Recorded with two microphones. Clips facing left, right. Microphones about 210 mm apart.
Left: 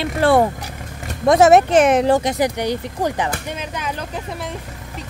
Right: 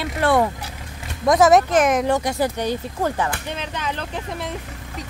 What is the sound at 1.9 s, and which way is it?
Speech, 30° left (ahead or behind).